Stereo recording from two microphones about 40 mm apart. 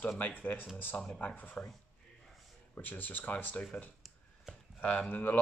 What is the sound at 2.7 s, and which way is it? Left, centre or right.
Speech, left.